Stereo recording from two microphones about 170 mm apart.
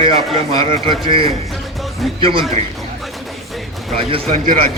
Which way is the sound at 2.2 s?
35° right (ahead or behind).